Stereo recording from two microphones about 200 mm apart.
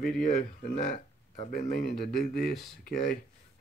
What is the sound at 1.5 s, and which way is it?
Speech, 40° left (ahead or behind).